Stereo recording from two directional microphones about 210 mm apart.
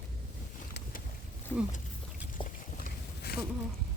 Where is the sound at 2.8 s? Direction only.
50° left (ahead or behind).